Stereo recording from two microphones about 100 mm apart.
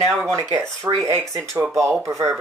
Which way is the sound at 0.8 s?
30° right (ahead or behind).